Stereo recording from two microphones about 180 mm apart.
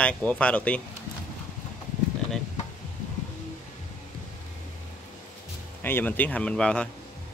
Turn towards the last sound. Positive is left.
turn(degrees=5)  # may be behind; listen again after turning